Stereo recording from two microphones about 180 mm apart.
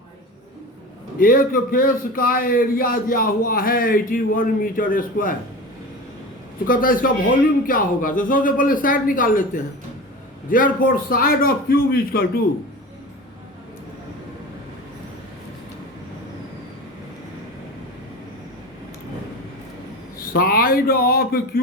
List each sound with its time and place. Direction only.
1.2 s a man's voice: 50° left (ahead or behind)
6.7 s a man's voice: 50° left (ahead or behind)
10.5 s a man's voice: 50° left (ahead or behind)
20.1 s a man's voice: 55° left (ahead or behind)